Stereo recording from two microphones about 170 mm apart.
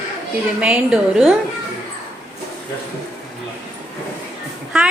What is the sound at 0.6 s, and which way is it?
Speech, 5° right (ahead or behind).